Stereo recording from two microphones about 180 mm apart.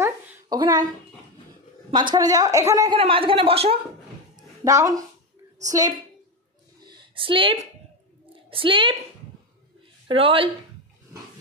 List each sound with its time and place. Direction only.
0.5 s a woman's voice: 20° right (ahead or behind)
1.9 s a woman's voice: 25° right (ahead or behind)
3.0 s speech: 30° right (ahead or behind)
4.6 s a woman's voice: 15° right (ahead or behind)
6.8 s a sound: 25° right (ahead or behind)
8.5 s a woman's voice: 30° right (ahead or behind)
10.0 s a woman's voice: 30° right (ahead or behind)